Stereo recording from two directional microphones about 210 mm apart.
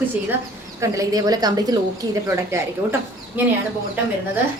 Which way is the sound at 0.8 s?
15° right (ahead or behind).